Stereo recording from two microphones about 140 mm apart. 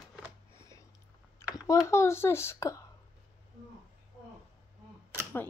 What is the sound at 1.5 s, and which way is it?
Speech, 25° left (ahead or behind).